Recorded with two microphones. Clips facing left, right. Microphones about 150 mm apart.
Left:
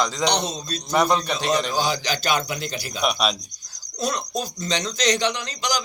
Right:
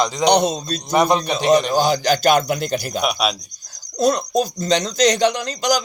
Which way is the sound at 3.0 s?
5° right (ahead or behind).